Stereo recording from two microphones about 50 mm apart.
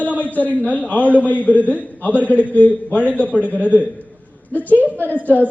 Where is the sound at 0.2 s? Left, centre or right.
Left.